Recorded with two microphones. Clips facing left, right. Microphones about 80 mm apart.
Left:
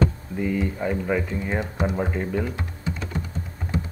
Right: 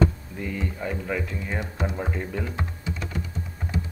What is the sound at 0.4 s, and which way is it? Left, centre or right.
Speech, centre.